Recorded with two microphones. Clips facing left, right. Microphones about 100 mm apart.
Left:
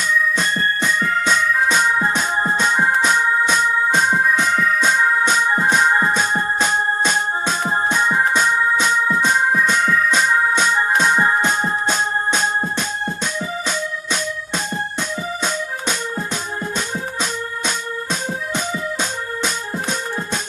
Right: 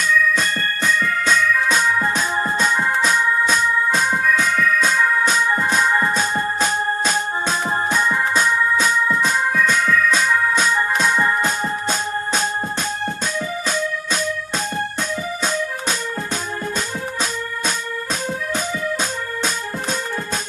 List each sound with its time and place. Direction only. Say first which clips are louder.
0.3 s organ: left 2 dB; 20° left (ahead or behind)
2.0 s music: left 1 dB; 20° left (ahead or behind)
9.0 s organ: left 2 dB; 25° left (ahead or behind)
11.1 s music: left 2 dB; 30° left (ahead or behind)